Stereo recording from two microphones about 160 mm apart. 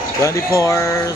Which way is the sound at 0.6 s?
20° left (ahead or behind).